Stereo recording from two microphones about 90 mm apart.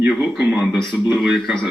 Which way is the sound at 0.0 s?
10° right (ahead or behind).